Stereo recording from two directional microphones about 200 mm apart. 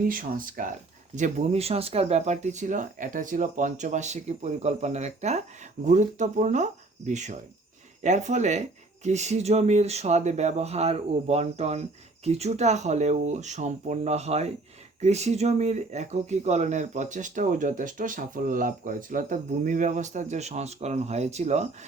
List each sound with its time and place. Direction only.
0.0 s speech: 45° right (ahead or behind)